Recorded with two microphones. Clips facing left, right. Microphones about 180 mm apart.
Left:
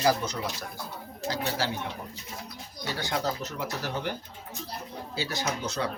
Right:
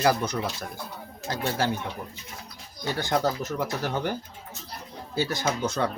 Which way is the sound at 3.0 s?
50° right (ahead or behind).